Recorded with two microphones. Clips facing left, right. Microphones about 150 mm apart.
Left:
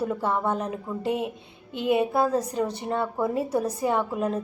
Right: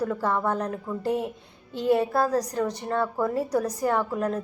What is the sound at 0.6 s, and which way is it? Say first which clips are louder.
Speech: right 1 dB; 5° left (ahead or behind).